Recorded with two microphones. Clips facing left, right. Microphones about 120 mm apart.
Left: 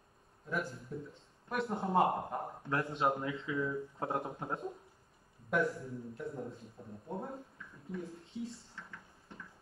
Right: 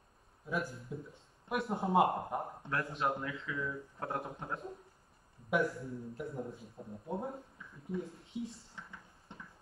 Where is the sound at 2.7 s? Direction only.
25° left (ahead or behind).